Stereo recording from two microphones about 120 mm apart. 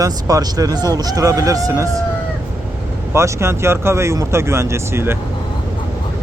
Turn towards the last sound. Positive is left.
turn(degrees=-20)  # may be behind; listen again after turning